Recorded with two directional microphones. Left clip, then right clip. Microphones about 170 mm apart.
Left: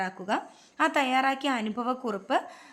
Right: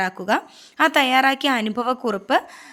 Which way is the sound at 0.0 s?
35° right (ahead or behind).